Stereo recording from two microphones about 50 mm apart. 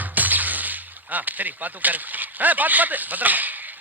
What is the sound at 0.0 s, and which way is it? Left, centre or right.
Speech, right.